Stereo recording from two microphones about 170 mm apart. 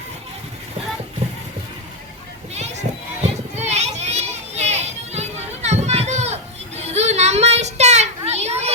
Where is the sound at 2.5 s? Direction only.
40° right (ahead or behind).